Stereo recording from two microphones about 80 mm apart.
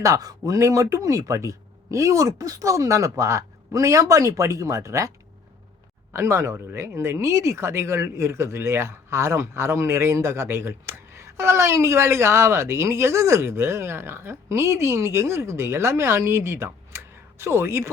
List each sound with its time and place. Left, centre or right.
0.0 s speech: right
6.1 s speech: right